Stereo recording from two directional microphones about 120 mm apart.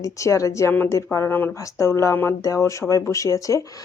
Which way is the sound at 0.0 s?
25° left (ahead or behind).